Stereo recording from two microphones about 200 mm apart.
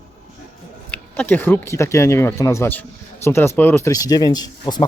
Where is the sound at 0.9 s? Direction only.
5° left (ahead or behind).